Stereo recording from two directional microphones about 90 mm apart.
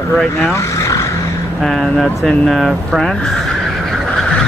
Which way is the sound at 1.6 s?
Centre (ahead or behind).